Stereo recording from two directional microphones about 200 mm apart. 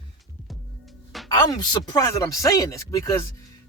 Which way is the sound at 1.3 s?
20° left (ahead or behind).